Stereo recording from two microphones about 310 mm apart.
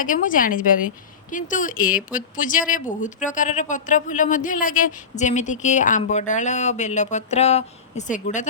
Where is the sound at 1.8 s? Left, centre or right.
Centre.